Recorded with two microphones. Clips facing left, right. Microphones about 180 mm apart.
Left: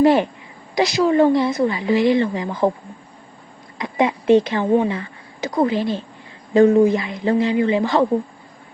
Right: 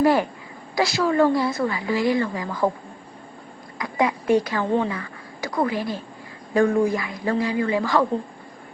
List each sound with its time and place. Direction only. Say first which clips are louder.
0.0 s a woman's voice: left 4 dB; 25° left (ahead or behind)
3.8 s a woman's voice: left 3 dB; 25° left (ahead or behind)